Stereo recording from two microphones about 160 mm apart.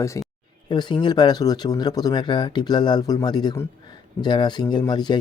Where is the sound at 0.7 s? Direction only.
25° left (ahead or behind).